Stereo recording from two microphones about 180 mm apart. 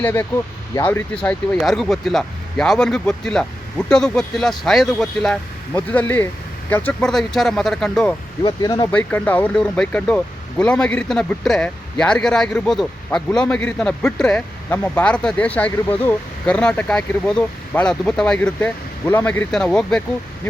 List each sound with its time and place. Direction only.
0.0 s speech: 15° left (ahead or behind)
8.4 s speech: 25° left (ahead or behind)
8.9 s speech: 5° left (ahead or behind)